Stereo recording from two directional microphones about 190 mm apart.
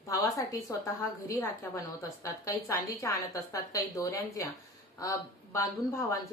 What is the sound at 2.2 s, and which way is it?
Speech, 15° left (ahead or behind).